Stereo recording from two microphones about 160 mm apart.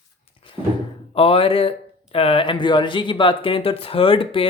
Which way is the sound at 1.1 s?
35° left (ahead or behind).